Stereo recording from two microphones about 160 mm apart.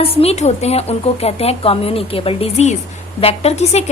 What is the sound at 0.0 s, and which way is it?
A woman's voice, 40° left (ahead or behind).